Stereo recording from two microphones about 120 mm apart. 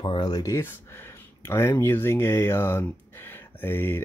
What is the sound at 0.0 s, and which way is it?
Speech, 35° left (ahead or behind).